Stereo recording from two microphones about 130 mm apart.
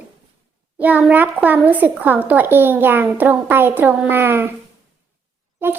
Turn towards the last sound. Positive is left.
turn(degrees=-15)  # may be behind; listen again after turning